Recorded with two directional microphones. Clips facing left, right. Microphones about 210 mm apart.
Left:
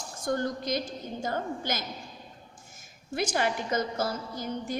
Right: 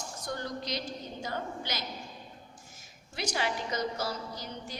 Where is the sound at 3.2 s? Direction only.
50° left (ahead or behind).